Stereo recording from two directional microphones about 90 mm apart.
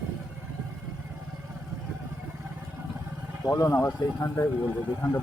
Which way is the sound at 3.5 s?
30° left (ahead or behind).